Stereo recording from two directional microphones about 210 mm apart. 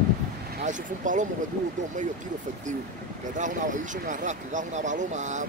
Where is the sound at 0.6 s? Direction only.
35° right (ahead or behind).